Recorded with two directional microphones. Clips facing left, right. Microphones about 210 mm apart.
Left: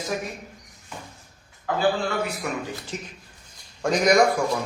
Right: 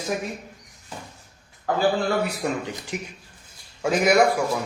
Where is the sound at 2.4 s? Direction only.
30° right (ahead or behind).